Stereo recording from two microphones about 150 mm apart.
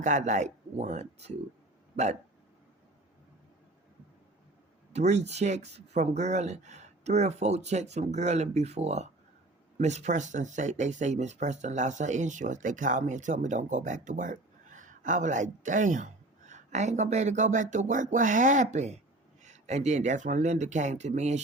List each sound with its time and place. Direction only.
0.0 s speech: 55° right (ahead or behind)
4.9 s speech: 45° right (ahead or behind)